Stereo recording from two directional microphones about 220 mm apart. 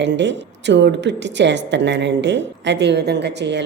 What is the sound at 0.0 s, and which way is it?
A woman's voice, 55° right (ahead or behind).